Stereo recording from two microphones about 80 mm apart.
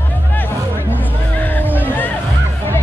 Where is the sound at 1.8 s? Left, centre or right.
Left.